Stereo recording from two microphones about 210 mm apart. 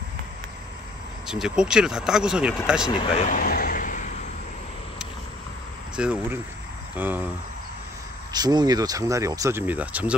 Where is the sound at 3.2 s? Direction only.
40° left (ahead or behind).